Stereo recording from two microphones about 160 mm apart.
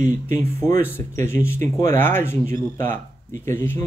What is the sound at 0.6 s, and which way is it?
Speech, 15° left (ahead or behind).